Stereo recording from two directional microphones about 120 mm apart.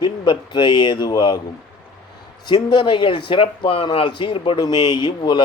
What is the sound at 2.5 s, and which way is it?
Speech, 40° left (ahead or behind).